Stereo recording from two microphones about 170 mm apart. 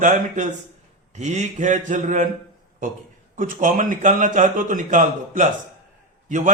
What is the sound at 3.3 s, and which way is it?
A man's voice, 50° right (ahead or behind).